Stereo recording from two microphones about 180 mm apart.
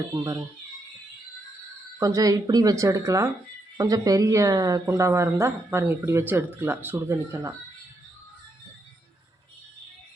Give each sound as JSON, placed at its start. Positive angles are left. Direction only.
{"t": 0.2, "sound": "speech", "side_deg": -20}
{"t": 2.0, "sound": "speech", "side_deg": -20}